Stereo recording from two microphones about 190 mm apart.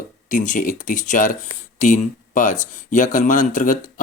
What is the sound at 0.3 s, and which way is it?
Speech, 45° left (ahead or behind).